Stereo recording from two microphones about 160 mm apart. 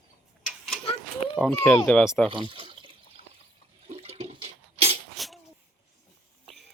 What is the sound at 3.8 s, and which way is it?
Toilet flush, 40° right (ahead or behind).